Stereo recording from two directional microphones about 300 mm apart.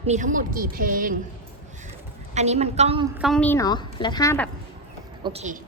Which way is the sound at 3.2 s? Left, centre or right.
Centre.